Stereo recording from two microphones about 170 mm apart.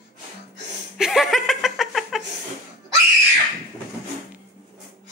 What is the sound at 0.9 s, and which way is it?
Chuckle, centre (ahead or behind).